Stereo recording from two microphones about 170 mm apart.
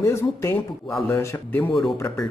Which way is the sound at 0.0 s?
15° left (ahead or behind).